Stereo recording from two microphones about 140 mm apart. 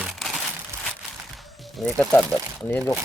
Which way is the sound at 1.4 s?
Centre (ahead or behind).